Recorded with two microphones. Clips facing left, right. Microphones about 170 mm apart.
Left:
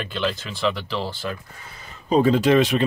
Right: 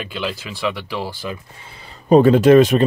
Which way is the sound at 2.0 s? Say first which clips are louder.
Right 7 dB; 60° right (ahead or behind).